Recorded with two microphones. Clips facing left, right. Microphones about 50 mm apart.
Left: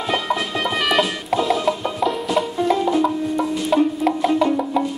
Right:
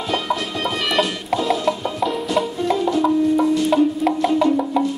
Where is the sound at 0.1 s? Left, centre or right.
Centre.